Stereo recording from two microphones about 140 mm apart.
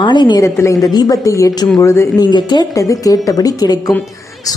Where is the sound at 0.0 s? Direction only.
35° left (ahead or behind).